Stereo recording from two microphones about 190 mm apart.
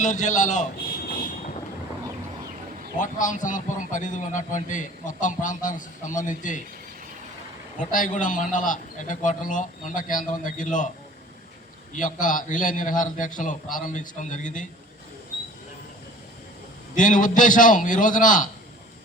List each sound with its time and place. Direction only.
0.0 s a man's voice: 40° left (ahead or behind)
1.0 s vehicle: 50° left (ahead or behind)
3.0 s a man's voice: 40° left (ahead or behind)
7.8 s a man's voice: 45° left (ahead or behind)
11.9 s a man's voice: 45° left (ahead or behind)
17.0 s a man's voice: 45° left (ahead or behind)